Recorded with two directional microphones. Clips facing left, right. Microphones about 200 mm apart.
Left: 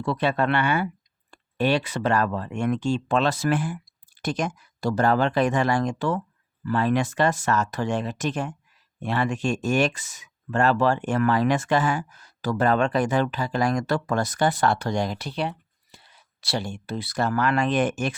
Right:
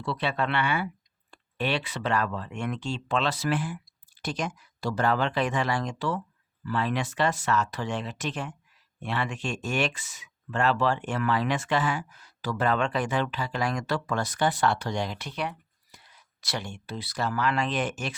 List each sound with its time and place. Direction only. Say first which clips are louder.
0.0 s speech: left 5 dB; 50° left (ahead or behind)